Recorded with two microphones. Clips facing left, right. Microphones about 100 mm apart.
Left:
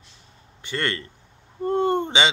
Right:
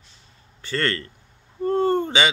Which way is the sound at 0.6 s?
20° left (ahead or behind).